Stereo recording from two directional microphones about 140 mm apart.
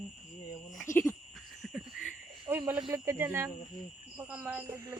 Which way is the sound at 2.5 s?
15° right (ahead or behind).